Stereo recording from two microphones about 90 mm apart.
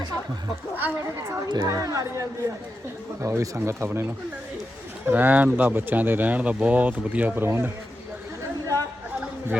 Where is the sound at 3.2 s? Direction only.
30° right (ahead or behind).